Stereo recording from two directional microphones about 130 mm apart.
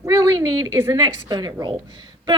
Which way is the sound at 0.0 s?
25° right (ahead or behind).